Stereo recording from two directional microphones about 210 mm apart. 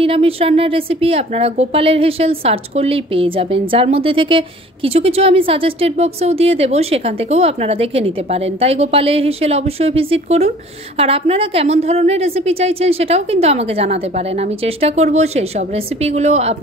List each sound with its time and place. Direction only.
0.0 s speech: 25° right (ahead or behind)